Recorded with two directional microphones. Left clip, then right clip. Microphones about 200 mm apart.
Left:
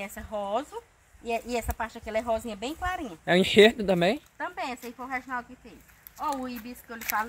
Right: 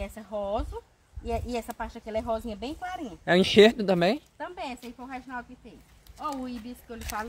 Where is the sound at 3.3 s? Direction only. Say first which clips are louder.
Even; 5° right (ahead or behind).